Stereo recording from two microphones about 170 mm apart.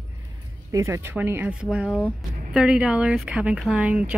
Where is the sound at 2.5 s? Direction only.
5° right (ahead or behind).